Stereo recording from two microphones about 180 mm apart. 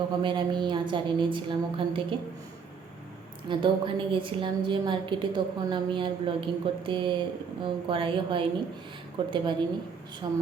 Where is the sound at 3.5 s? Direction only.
25° right (ahead or behind).